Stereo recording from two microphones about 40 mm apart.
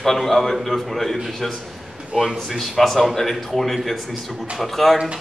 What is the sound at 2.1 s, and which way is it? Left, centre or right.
Speech, centre.